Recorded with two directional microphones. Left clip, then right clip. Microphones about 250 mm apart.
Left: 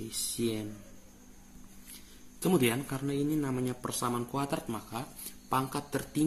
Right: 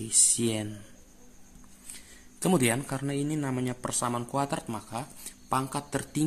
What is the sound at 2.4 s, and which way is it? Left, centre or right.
Speech, right.